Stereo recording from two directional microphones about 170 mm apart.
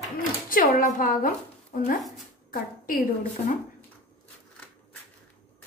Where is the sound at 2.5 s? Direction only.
60° left (ahead or behind).